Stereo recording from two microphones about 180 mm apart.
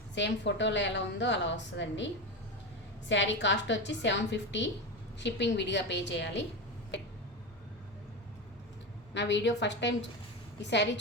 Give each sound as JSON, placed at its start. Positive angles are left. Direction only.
{"t": 0.1, "sound": "a woman's voice", "side_deg": 80}
{"t": 3.1, "sound": "a woman's voice", "side_deg": 90}
{"t": 9.1, "sound": "a woman's voice", "side_deg": 80}